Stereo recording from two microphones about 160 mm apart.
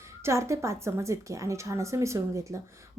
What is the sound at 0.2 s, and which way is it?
A woman's voice, 15° right (ahead or behind).